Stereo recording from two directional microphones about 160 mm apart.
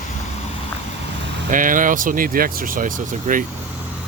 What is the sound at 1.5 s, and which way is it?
Speech, 55° right (ahead or behind).